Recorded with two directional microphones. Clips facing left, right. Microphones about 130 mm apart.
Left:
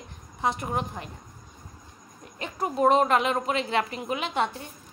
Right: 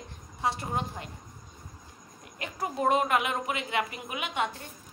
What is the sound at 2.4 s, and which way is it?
A woman's voice, 25° left (ahead or behind).